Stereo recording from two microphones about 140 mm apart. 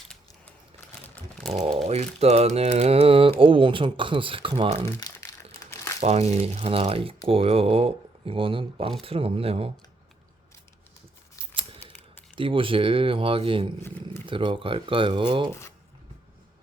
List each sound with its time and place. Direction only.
1.1 s a sound: 5° left (ahead or behind)
1.8 s speech: 50° right (ahead or behind)
4.9 s crumpling: 25° left (ahead or behind)
6.0 s speech: 50° right (ahead or behind)
12.4 s speech: 40° right (ahead or behind)